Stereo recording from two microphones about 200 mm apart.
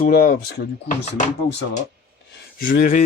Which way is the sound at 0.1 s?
45° left (ahead or behind).